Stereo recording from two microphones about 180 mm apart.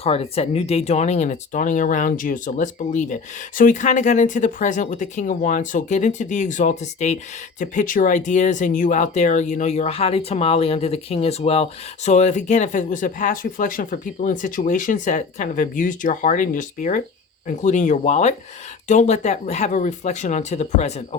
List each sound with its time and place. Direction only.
0.0 s speech: 35° left (ahead or behind)